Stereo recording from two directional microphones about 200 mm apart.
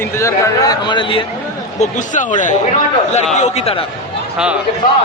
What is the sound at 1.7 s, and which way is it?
Speech, 35° left (ahead or behind).